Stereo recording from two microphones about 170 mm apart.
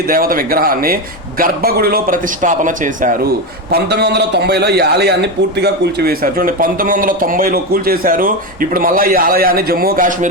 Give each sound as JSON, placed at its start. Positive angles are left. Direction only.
{"t": 0.1, "sound": "a man's voice", "side_deg": -55}
{"t": 3.7, "sound": "a man's voice", "side_deg": -70}